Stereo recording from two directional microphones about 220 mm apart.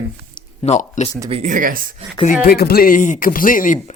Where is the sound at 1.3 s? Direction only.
30° right (ahead or behind).